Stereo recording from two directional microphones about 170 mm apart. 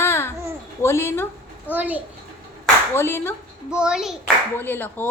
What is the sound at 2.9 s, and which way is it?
Speech, 15° left (ahead or behind).